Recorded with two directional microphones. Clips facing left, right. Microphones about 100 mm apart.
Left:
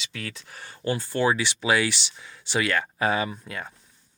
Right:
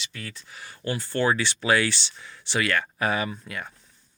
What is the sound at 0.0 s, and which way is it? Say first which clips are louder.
Speech: left 3 dB; 85° left.